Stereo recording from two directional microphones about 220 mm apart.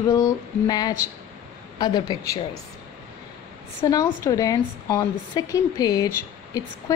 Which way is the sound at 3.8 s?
15° left (ahead or behind).